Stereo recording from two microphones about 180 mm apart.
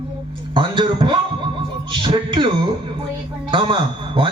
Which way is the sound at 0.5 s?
25° right (ahead or behind).